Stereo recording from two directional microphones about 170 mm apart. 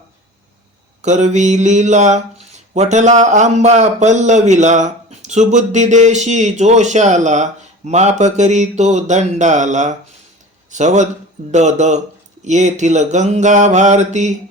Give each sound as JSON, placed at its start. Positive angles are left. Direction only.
{"t": 1.0, "sound": "a man's voice", "side_deg": -45}